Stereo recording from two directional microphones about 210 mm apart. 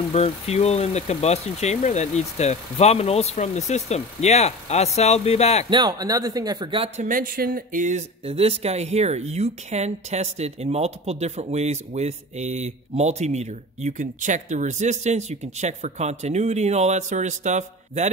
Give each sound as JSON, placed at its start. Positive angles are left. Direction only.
{"t": 0.1, "sound": "speech", "side_deg": 30}
{"t": 5.7, "sound": "speech", "side_deg": -20}
{"t": 7.1, "sound": "speech", "side_deg": -40}